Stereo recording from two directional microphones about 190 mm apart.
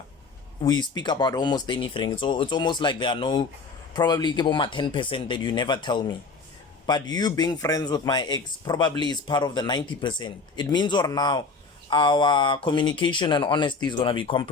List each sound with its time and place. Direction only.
0.6 s speech: 20° left (ahead or behind)